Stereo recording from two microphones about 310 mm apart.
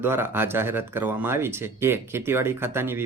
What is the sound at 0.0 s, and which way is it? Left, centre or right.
Speech, centre.